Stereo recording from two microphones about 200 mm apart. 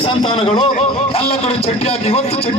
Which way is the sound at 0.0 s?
25° left (ahead or behind).